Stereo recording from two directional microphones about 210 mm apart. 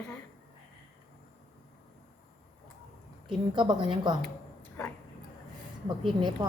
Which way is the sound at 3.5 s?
20° right (ahead or behind).